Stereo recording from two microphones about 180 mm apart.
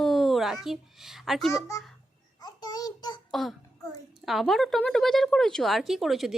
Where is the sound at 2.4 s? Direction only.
20° left (ahead or behind).